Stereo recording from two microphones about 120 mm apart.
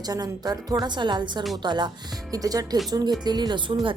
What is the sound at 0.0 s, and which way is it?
A woman's voice, 30° right (ahead or behind).